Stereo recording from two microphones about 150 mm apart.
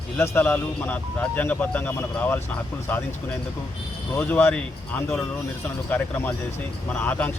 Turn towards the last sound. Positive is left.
turn(degrees=10)  # may be behind; listen again after turning